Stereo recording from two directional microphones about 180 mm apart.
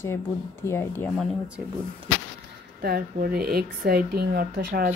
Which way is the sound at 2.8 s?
55° right (ahead or behind).